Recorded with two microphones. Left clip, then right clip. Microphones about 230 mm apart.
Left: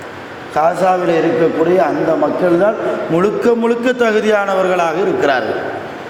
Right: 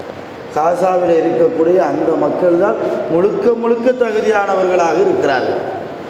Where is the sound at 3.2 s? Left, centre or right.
Left.